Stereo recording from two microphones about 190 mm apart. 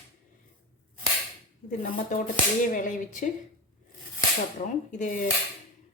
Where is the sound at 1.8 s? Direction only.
50° left (ahead or behind).